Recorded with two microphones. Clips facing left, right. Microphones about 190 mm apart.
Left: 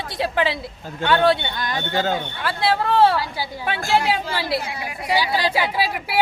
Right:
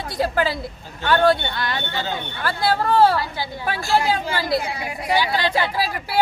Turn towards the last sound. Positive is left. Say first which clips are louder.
# left 1 dB
turn(degrees=5)  # may be behind; listen again after turning